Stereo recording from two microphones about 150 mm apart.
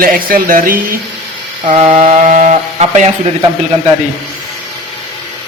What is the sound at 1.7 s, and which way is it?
Mantra, 45° right (ahead or behind).